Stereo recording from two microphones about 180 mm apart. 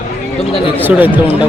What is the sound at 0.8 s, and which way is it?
Speech, 10° right (ahead or behind).